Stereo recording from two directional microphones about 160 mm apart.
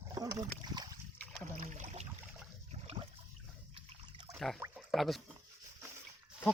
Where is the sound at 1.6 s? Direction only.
50° right (ahead or behind).